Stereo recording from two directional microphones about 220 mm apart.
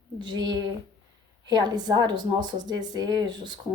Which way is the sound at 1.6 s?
20° right (ahead or behind).